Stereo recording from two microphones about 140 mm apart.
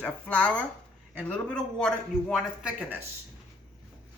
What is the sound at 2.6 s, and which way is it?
Speech, 10° right (ahead or behind).